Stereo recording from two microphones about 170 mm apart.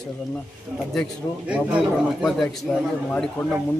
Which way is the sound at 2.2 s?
Centre (ahead or behind).